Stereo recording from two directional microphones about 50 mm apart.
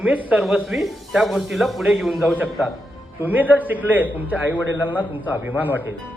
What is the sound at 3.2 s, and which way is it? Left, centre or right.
Speech, right.